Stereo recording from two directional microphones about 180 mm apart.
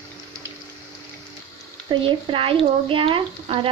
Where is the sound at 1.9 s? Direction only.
30° right (ahead or behind).